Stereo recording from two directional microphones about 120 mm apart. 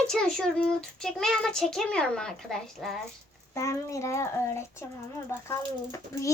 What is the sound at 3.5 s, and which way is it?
Speech, 25° left (ahead or behind).